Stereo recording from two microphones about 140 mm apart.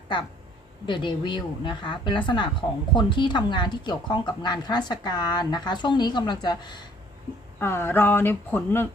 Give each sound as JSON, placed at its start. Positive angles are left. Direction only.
{"t": 0.9, "sound": "a woman's voice", "side_deg": 35}
{"t": 7.6, "sound": "speech", "side_deg": 20}